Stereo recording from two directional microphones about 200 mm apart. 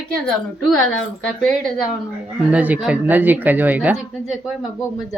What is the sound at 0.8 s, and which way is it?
Speech, 85° left.